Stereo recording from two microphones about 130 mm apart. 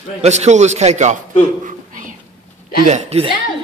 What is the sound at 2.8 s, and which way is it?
Speech, 60° right (ahead or behind).